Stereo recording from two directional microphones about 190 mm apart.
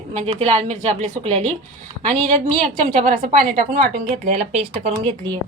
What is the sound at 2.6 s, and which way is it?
A woman's voice, 40° right (ahead or behind).